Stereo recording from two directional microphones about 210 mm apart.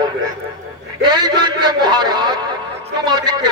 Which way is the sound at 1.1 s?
20° right (ahead or behind).